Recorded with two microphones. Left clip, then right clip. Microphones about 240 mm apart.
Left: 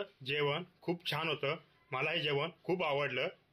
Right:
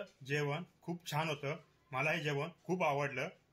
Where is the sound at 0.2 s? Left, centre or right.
Left.